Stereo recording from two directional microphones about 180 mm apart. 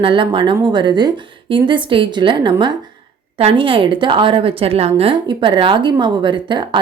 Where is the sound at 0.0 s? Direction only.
25° right (ahead or behind).